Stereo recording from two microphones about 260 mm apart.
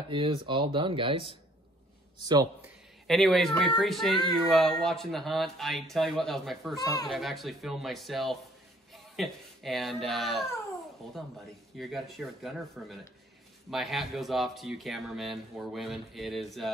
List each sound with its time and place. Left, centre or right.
0.1 s speech: centre
2.2 s a man's voice: centre
3.1 s speech: centre
6.7 s speech: centre
7.1 s speech: centre
11.7 s speech: centre